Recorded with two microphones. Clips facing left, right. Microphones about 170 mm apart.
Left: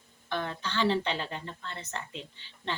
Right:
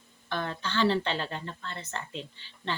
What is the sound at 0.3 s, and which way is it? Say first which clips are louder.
Speech: right 1 dB; 15° left (ahead or behind).